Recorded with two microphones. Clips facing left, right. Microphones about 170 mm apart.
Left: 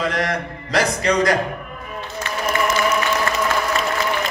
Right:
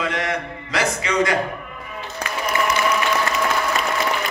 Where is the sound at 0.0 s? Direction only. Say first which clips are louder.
Left 2 dB; 40° left (ahead or behind).